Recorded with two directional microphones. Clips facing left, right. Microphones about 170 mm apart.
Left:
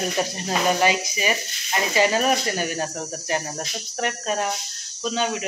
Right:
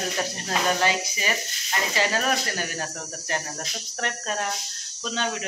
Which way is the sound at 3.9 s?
10° left (ahead or behind).